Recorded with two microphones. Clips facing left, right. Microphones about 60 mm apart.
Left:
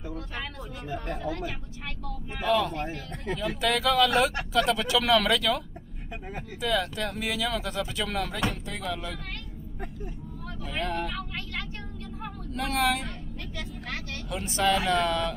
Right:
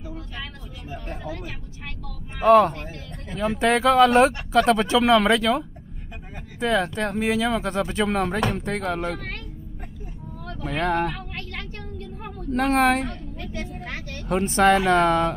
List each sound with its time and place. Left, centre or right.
2.4 s speech: right
6.6 s speech: right
10.6 s speech: right
12.2 s vehicle: right
13.4 s vehicle: right
14.3 s speech: right